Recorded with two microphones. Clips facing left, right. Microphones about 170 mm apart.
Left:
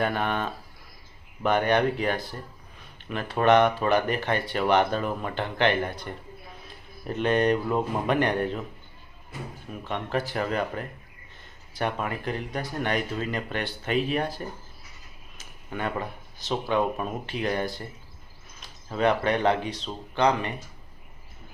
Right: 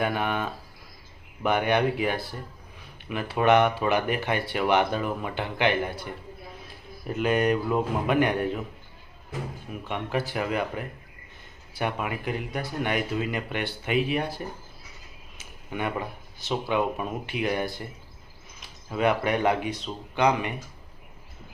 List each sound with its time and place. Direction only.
0.0 s speech: 10° right (ahead or behind)
9.9 s speech: 10° right (ahead or behind)
15.4 s speech: 10° right (ahead or behind)